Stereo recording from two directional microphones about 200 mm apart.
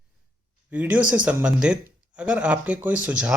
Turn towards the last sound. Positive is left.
turn(degrees=-5)  # may be behind; listen again after turning